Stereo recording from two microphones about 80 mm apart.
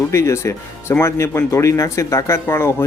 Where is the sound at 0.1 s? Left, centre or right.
Left.